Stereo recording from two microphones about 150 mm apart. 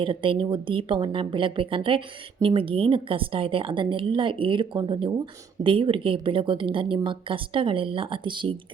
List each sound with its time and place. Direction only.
0.0 s a woman's voice: 35° right (ahead or behind)